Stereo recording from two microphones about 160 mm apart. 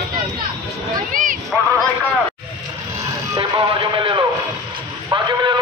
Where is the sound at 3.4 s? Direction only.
30° right (ahead or behind).